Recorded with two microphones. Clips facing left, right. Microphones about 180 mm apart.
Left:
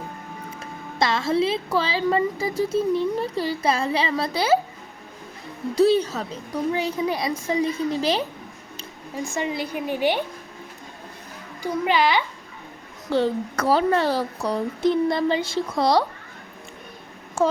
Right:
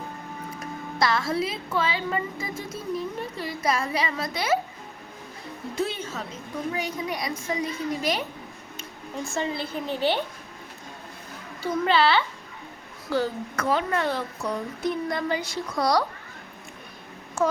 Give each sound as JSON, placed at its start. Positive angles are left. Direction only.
{"t": 0.6, "sound": "a woman's voice", "side_deg": 25}
{"t": 5.7, "sound": "a woman's voice", "side_deg": 35}
{"t": 9.3, "sound": "a woman's voice", "side_deg": 15}
{"t": 11.6, "sound": "a woman's voice", "side_deg": 15}
{"t": 13.1, "sound": "a woman's voice", "side_deg": 25}
{"t": 17.4, "sound": "a woman's voice", "side_deg": 30}